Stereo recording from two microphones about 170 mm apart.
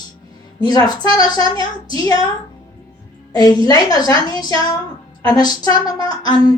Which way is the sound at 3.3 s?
25° left (ahead or behind).